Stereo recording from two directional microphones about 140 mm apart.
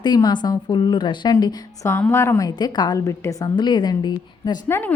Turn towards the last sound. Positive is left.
turn(degrees=15)  # may be behind; listen again after turning